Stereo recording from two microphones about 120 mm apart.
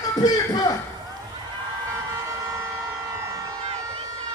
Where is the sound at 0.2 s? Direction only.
30° left (ahead or behind).